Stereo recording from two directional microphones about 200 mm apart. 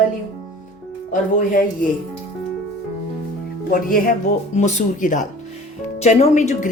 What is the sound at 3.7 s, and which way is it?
Speech, 45° left (ahead or behind).